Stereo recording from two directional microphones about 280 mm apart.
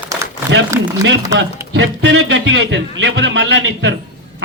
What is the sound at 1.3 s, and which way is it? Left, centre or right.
Speech, right.